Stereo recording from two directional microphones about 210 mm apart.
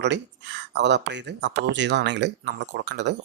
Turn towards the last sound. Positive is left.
turn(degrees=-55)  # may be behind; listen again after turning